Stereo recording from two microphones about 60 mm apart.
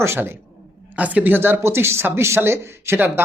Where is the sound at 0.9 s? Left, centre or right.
Right.